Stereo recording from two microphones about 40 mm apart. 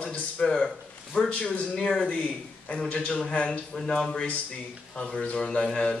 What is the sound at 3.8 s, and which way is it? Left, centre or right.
A man's voice, centre.